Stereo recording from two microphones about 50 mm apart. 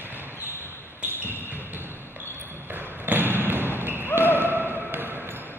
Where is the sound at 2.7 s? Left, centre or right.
Right.